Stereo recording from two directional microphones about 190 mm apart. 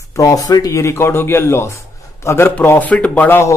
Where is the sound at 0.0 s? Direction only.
15° left (ahead or behind).